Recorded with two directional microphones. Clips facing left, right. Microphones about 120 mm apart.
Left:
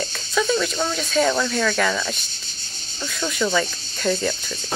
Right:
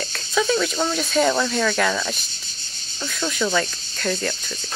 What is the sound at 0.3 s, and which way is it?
Speech, 5° right (ahead or behind).